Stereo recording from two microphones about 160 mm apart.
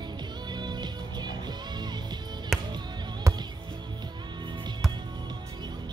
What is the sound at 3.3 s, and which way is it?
Music, 20° right (ahead or behind).